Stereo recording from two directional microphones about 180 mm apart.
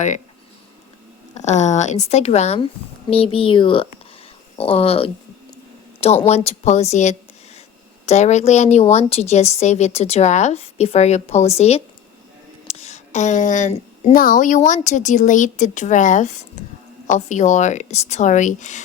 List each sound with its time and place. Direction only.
1.3 s a woman's voice: 40° left (ahead or behind)
6.2 s a woman's voice: 35° left (ahead or behind)